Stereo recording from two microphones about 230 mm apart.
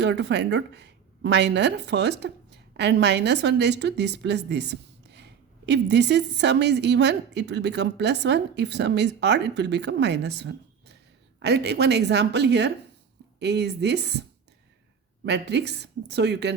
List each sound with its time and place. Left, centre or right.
0.0 s a woman's voice: right